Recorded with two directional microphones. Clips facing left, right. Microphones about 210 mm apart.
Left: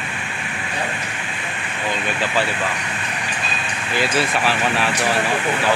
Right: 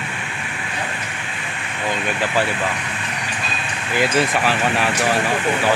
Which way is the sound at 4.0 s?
15° right (ahead or behind).